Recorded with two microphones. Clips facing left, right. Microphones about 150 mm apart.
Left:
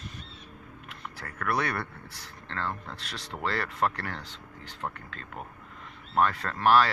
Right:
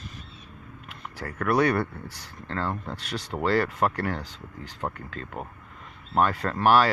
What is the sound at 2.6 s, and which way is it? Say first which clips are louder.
Speech: right 4 dB; 30° right (ahead or behind).